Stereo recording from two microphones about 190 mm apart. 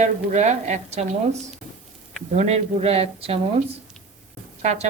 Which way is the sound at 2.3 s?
35° right (ahead or behind).